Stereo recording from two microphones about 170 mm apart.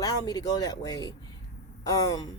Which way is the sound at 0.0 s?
20° left (ahead or behind).